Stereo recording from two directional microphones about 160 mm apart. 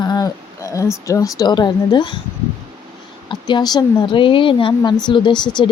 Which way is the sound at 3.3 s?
25° left (ahead or behind).